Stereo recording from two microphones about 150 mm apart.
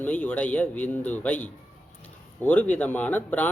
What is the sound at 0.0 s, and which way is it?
Speech, 10° left (ahead or behind).